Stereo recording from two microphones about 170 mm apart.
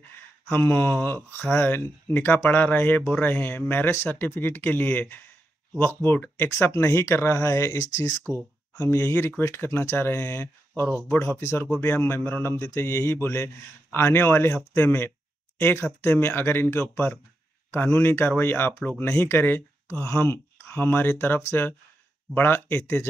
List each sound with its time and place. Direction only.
0.1 s speech: 15° left (ahead or behind)